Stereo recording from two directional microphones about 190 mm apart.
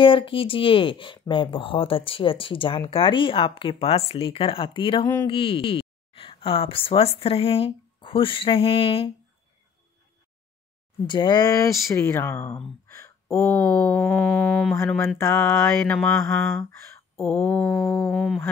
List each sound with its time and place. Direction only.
0.0 s speech: 25° left (ahead or behind)
11.1 s speech: 25° left (ahead or behind)
13.7 s mantra: 5° left (ahead or behind)
14.8 s speech: 15° left (ahead or behind)
15.8 s mantra: 5° left (ahead or behind)